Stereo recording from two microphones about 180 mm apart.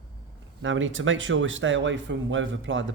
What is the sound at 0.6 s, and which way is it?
A man's voice, 90° right.